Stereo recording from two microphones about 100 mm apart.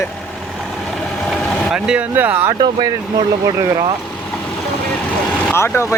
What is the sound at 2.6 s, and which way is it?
Speech, 45° right (ahead or behind).